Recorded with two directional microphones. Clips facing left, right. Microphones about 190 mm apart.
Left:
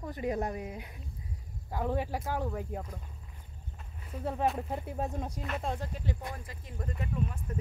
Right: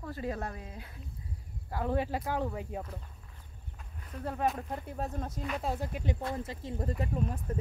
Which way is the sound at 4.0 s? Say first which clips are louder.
Left 1 dB; 5° left (ahead or behind).